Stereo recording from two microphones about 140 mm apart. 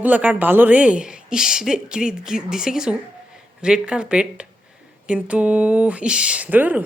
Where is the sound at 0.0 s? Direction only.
10° right (ahead or behind).